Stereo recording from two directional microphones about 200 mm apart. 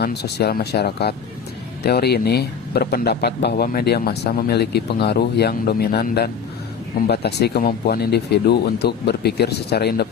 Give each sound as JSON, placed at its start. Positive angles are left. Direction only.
{"t": 0.0, "sound": "speech", "side_deg": 55}